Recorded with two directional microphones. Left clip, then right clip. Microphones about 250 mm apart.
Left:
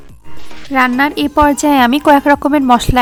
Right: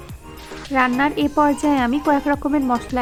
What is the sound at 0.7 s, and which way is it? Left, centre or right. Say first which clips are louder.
A woman's voice: left 6 dB; left.